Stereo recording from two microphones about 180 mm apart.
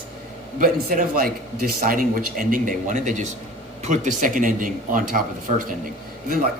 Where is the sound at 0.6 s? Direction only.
55° right (ahead or behind).